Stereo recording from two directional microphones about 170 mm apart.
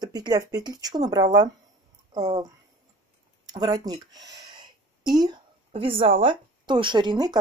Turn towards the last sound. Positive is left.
turn(degrees=-25)  # may be behind; listen again after turning